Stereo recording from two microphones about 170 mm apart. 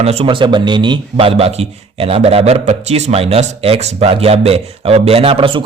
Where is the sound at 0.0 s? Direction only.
40° right (ahead or behind).